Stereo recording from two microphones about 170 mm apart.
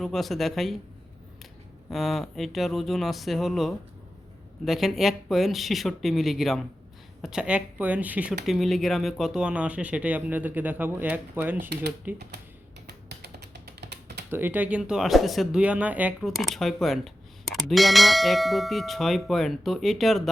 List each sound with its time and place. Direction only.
0.0 s speech: centre (ahead or behind)
1.9 s speech: centre (ahead or behind)
11.7 s speech: 80° right
12.9 s music: 80° right
14.3 s speech: 10° right (ahead or behind)